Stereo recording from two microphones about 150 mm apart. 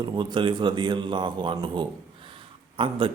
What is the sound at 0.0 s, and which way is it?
A man's voice, 30° right (ahead or behind).